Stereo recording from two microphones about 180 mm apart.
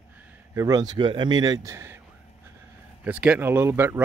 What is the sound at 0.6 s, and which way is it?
A man's voice, 20° right (ahead or behind).